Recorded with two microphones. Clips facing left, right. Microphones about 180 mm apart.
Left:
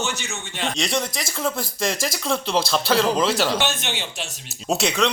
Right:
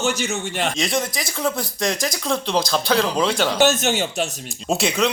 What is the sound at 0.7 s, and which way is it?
Speech, centre (ahead or behind).